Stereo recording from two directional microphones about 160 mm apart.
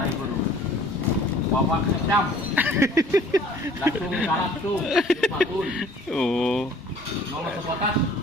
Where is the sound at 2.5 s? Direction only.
15° right (ahead or behind).